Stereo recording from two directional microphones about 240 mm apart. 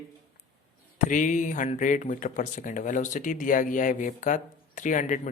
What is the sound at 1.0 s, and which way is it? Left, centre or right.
Speech, left.